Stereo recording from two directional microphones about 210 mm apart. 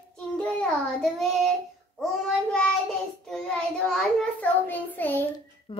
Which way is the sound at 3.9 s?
5° left (ahead or behind).